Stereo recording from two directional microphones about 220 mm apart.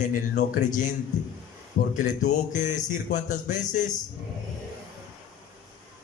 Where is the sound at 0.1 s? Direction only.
35° left (ahead or behind).